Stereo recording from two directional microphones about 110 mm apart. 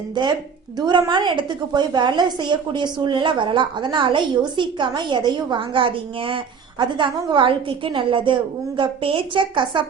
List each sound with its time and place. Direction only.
0.1 s a woman's voice: 40° right (ahead or behind)